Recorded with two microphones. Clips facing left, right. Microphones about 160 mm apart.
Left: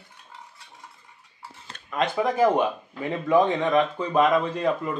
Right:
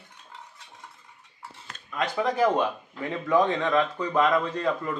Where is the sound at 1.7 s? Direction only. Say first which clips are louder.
Left 2 dB; 65° left (ahead or behind).